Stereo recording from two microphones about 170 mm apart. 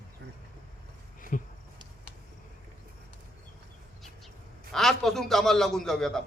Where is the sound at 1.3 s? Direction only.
50° left (ahead or behind).